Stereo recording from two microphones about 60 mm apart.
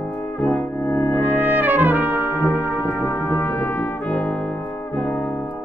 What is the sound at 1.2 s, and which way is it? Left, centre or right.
Brass instrument, right.